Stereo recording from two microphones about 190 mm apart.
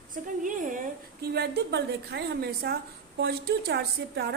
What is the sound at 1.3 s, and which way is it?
A woman's voice, 60° right (ahead or behind).